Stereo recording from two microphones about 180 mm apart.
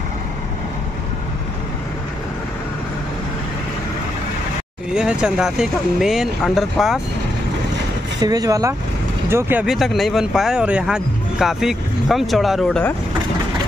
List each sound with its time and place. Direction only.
4.9 s speech: 5° right (ahead or behind)
8.2 s speech: 20° right (ahead or behind); by 12.8 s centre (ahead or behind)